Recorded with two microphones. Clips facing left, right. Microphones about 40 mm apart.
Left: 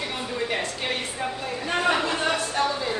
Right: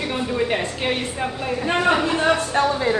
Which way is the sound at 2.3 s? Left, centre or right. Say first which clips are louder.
Right 5 dB; right.